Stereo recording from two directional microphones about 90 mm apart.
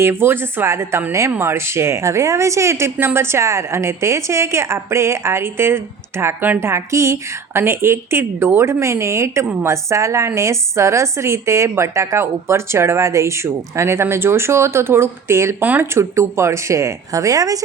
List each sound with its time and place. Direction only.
0.0 s a woman's voice: 25° right (ahead or behind)
15.6 s a woman's voice: 20° right (ahead or behind)
16.0 s a woman's voice: 30° right (ahead or behind)